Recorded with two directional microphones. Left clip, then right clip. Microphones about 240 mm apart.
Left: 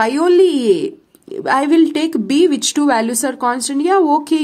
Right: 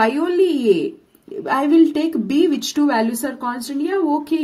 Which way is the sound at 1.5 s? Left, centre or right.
Left.